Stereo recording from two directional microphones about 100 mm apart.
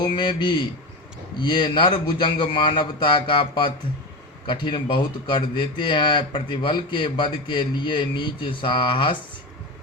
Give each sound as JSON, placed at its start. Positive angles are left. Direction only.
{"t": 0.0, "sound": "speech", "side_deg": 55}